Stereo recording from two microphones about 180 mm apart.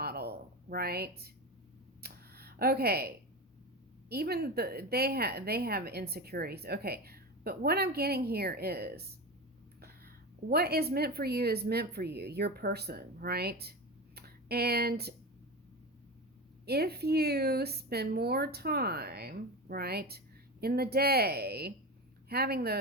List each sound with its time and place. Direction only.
0.0 s a sound: 60° right (ahead or behind)
4.1 s a woman's voice: 60° right (ahead or behind)
10.5 s a woman's voice: 60° right (ahead or behind)
16.6 s a woman's voice: 60° right (ahead or behind)